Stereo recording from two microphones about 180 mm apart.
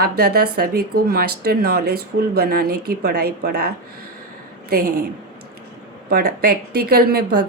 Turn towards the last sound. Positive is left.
turn(degrees=-60)  # may be behind; listen again after turning